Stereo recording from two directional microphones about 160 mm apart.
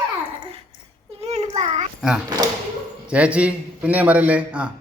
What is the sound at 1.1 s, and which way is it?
Child singing, 40° right (ahead or behind).